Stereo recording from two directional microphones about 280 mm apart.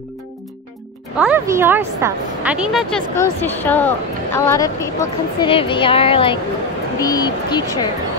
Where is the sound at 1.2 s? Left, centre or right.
Centre.